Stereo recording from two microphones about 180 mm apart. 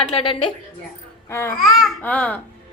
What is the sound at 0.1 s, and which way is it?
Speech, 30° left (ahead or behind).